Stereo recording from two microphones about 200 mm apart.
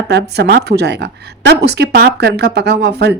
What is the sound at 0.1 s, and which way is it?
A woman's voice, 55° right (ahead or behind).